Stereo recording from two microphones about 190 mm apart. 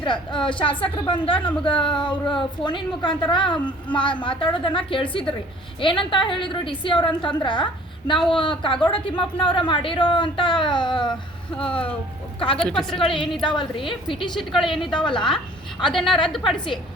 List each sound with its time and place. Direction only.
0.0 s a woman's voice: 25° left (ahead or behind)
12.5 s a woman's voice: 5° left (ahead or behind)
13.1 s a woman's voice: 25° left (ahead or behind)
14.8 s a woman's voice: centre (ahead or behind)